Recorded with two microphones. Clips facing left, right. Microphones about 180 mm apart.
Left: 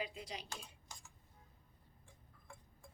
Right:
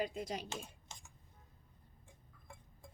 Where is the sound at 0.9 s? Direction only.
25° right (ahead or behind).